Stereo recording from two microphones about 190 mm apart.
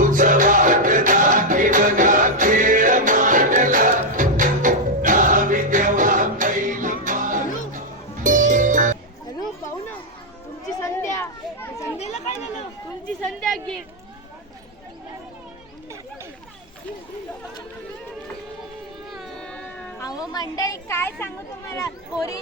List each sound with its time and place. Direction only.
0.0 s music: 45° right (ahead or behind)
10.8 s children playing: 15° left (ahead or behind)
11.9 s chatter: 35° left (ahead or behind)
19.1 s music: centre (ahead or behind)
20.0 s music: 20° left (ahead or behind)
20.3 s a sound: 20° left (ahead or behind)